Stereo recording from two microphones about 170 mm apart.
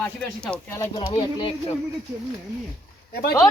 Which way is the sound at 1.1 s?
30° left (ahead or behind).